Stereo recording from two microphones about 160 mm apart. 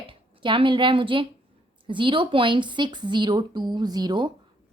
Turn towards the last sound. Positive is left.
turn(degrees=-25)  # may be behind; listen again after turning